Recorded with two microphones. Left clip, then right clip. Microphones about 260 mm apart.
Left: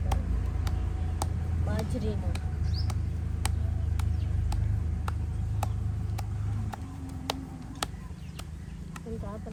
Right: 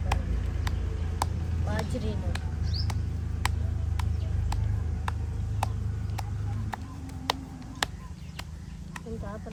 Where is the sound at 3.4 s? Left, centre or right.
Centre.